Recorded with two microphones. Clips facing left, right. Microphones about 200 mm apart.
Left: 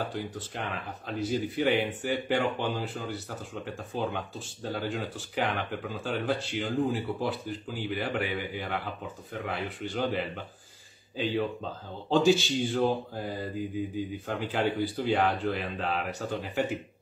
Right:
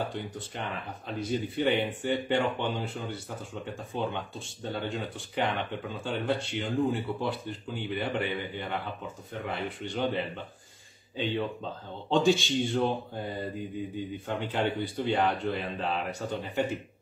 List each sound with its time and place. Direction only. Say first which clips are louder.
0.1 s speech: left 1 dB; 5° left (ahead or behind)
12.1 s speech: left 1 dB; centre (ahead or behind)